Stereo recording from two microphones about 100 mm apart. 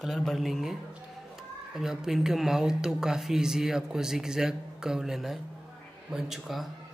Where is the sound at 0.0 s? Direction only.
Centre (ahead or behind).